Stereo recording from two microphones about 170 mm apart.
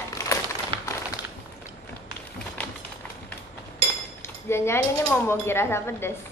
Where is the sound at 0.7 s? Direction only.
30° right (ahead or behind).